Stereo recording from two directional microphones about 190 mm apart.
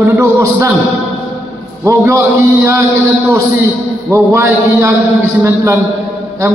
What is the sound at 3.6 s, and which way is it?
A man's voice, 15° right (ahead or behind).